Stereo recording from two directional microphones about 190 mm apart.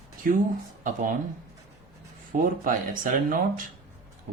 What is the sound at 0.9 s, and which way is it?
Speech, 45° right (ahead or behind).